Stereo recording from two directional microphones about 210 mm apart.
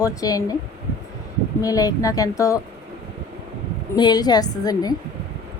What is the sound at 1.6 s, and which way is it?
A woman's voice, 15° left (ahead or behind).